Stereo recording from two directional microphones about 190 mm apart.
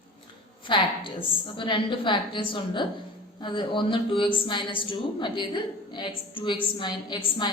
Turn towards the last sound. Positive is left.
turn(degrees=25)  # may be behind; listen again after turning